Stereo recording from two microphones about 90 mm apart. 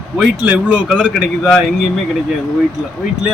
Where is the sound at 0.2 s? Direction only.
15° right (ahead or behind).